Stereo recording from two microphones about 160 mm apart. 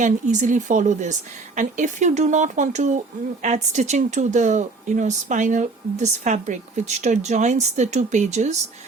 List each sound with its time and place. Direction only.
0.0 s speech: 50° right (ahead or behind)